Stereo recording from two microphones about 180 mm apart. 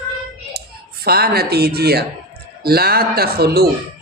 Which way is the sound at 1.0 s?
60° right (ahead or behind).